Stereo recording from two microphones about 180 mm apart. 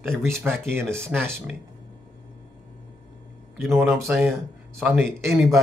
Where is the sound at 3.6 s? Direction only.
15° right (ahead or behind).